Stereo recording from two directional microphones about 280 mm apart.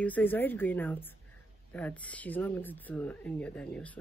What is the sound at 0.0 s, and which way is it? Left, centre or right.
Speech, centre.